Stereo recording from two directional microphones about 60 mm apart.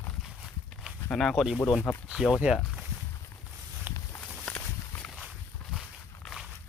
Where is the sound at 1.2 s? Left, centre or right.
Centre.